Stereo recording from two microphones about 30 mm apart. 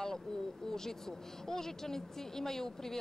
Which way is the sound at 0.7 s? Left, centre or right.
Centre.